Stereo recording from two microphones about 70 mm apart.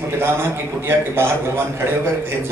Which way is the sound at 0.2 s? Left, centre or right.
Right.